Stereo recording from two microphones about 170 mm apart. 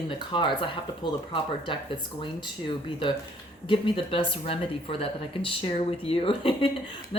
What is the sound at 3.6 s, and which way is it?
Speech, 30° left (ahead or behind).